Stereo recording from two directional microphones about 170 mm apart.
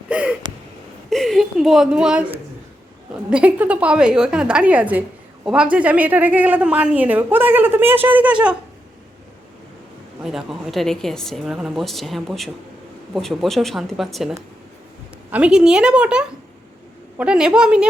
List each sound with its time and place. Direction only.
0.1 s gasp: 5° right (ahead or behind)
1.1 s a sound: centre (ahead or behind)
3.2 s speech: 5° right (ahead or behind)
10.2 s a woman's voice: centre (ahead or behind)